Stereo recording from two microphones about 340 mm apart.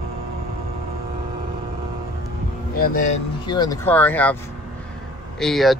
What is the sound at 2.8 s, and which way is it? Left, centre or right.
Speech, left.